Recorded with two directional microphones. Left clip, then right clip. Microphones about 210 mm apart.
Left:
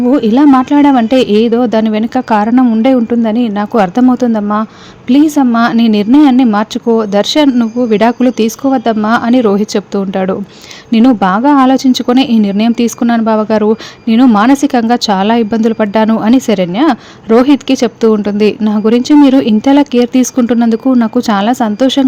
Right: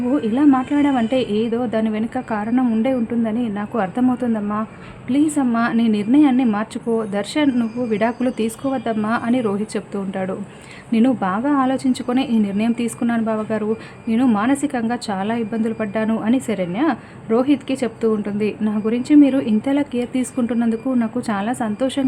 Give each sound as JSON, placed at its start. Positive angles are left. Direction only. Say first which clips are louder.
{"t": 0.1, "sound": "a woman's voice", "louder": "left 9 dB", "side_deg": 35}